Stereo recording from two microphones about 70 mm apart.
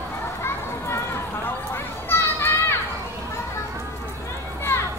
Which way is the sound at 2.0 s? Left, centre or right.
Left.